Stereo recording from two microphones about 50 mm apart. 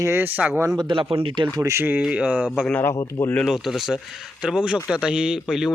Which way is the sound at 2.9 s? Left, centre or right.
Left.